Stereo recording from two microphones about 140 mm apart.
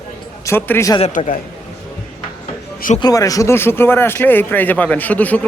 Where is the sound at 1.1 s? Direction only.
70° left (ahead or behind).